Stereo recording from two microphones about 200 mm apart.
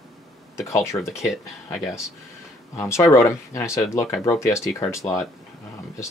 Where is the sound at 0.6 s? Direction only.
15° left (ahead or behind).